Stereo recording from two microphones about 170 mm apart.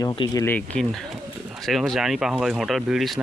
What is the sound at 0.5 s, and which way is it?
Speech, 5° left (ahead or behind).